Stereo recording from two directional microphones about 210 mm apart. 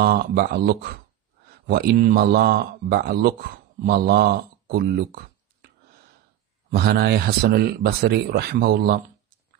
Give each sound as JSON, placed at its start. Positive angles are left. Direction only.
{"t": 0.0, "sound": "a man's voice", "side_deg": -50}
{"t": 6.7, "sound": "speech", "side_deg": -50}